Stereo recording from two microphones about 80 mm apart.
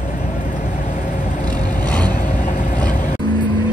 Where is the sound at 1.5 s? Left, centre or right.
Centre.